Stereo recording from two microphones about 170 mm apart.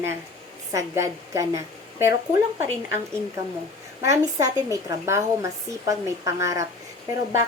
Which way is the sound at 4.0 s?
20° right (ahead or behind).